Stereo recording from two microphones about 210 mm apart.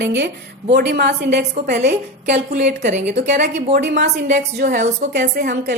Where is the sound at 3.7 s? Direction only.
50° right (ahead or behind).